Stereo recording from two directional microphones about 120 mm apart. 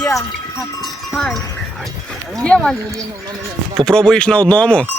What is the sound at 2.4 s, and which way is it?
Speech, 5° left (ahead or behind).